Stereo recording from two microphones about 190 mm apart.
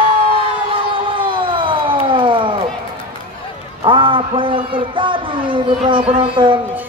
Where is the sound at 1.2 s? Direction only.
25° right (ahead or behind).